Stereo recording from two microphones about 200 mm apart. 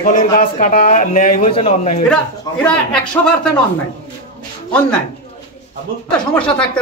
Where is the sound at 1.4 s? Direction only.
30° left (ahead or behind).